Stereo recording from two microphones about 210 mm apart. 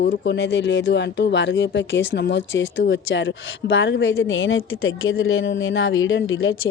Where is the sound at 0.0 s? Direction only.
55° left (ahead or behind).